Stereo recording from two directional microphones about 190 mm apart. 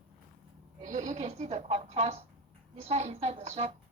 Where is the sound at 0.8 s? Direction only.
40° right (ahead or behind).